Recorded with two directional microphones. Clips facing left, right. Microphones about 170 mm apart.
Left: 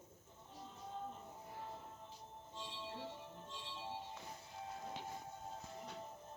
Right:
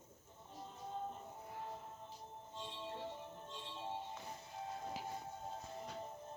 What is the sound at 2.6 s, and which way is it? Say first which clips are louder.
Music: right 2 dB; 50° right (ahead or behind).